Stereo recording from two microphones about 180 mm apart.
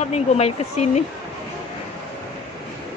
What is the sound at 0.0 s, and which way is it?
Speech, 40° left (ahead or behind).